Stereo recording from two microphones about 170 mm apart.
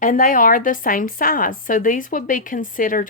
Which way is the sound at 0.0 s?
50° left (ahead or behind).